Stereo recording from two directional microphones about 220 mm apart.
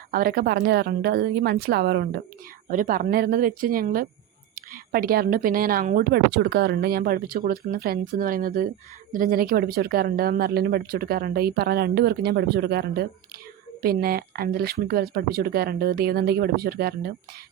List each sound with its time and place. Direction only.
0.1 s a woman's voice: 45° right (ahead or behind)